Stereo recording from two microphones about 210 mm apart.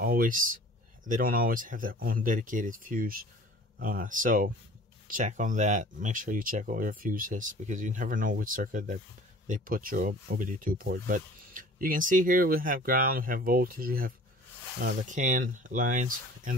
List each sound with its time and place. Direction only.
0.0 s speech: 45° right (ahead or behind)